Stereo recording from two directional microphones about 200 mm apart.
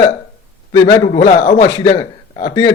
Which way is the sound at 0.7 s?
15° left (ahead or behind).